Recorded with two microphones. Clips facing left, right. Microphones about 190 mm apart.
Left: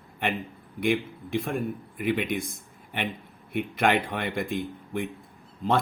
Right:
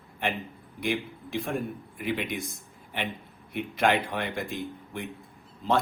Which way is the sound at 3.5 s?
55° left (ahead or behind).